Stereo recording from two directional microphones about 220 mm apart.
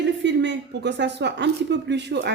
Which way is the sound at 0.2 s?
55° right (ahead or behind).